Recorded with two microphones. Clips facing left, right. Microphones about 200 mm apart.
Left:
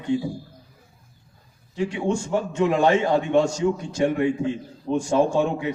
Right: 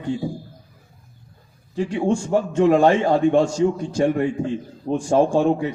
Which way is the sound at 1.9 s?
40° right (ahead or behind).